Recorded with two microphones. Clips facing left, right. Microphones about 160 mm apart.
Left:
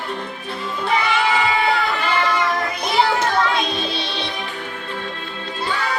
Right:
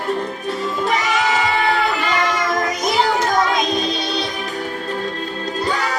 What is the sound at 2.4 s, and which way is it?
Music, 40° right (ahead or behind).